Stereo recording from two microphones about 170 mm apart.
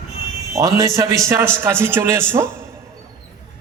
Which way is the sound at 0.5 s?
20° right (ahead or behind).